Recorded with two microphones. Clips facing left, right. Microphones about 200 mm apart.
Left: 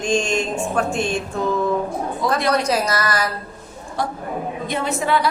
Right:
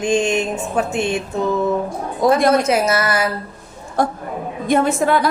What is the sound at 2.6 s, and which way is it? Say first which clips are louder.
Speech: right 4 dB; 25° right (ahead or behind).